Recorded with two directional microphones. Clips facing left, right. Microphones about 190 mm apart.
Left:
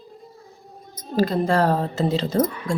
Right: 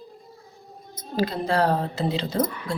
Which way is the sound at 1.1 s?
45° left (ahead or behind).